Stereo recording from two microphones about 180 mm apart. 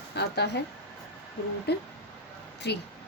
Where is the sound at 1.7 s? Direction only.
65° left (ahead or behind).